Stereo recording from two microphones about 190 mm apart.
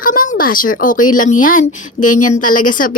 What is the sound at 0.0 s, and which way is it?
Speech, 45° left (ahead or behind).